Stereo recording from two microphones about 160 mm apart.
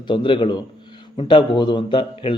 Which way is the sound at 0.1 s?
30° left (ahead or behind).